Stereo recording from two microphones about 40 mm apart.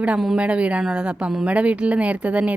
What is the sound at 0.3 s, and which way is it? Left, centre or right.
Speech, right.